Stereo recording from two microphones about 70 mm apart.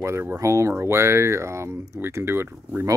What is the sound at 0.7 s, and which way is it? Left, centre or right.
Speech, right.